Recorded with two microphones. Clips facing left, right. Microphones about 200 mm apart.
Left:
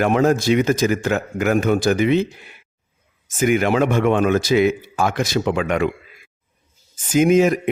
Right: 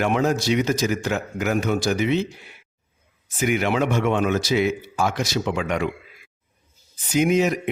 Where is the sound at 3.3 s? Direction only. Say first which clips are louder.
Left 5 dB; 50° left (ahead or behind).